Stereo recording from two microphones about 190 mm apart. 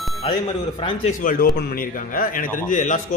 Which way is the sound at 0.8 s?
25° left (ahead or behind).